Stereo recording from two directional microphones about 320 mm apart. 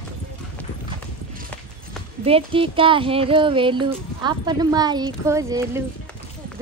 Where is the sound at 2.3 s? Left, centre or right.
Centre.